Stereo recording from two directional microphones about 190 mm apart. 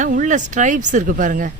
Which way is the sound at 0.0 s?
40° right (ahead or behind).